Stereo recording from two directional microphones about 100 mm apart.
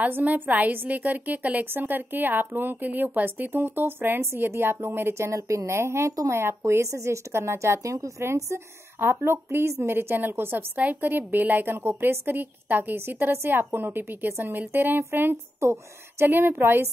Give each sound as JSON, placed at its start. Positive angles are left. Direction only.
{"t": 0.0, "sound": "a woman's voice", "side_deg": -15}